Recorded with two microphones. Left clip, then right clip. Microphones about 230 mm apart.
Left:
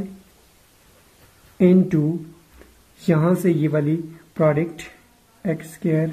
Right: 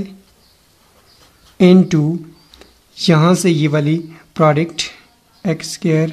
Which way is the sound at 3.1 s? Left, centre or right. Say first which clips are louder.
Right 6 dB; right.